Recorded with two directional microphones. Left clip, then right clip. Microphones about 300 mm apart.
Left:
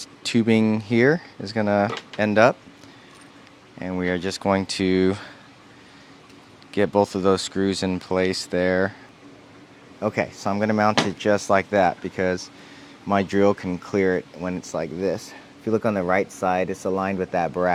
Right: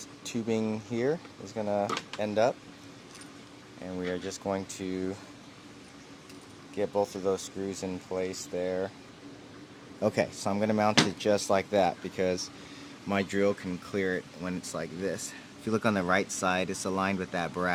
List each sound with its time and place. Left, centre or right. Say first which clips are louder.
0.0 s speech: left 13 dB; left
3.8 s speech: left 9 dB; left
6.7 s speech: left 9 dB; left
10.0 s speech: left 4 dB; centre; by 14.3 s left
14.4 s speech: left 8 dB; left
15.6 s speech: left 6 dB; centre